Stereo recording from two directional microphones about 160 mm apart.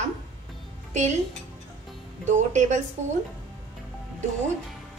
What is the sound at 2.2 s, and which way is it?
Speech, 50° right (ahead or behind).